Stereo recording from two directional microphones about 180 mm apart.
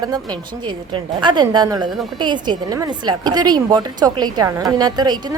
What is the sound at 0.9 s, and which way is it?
A woman's voice, 25° right (ahead or behind).